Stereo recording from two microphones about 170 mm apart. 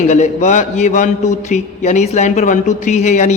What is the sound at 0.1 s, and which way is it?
Speech, 45° left (ahead or behind).